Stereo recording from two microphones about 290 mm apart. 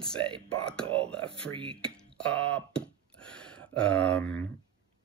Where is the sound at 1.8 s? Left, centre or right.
Centre.